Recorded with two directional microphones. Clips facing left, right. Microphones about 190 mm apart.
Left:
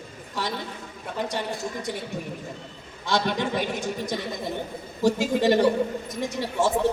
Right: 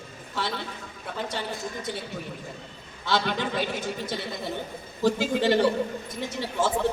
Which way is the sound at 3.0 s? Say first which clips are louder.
Left 2 dB; 15° left (ahead or behind).